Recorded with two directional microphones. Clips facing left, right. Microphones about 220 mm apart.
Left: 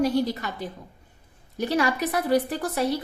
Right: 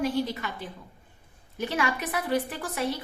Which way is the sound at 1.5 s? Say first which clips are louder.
Left 5 dB; 40° left (ahead or behind).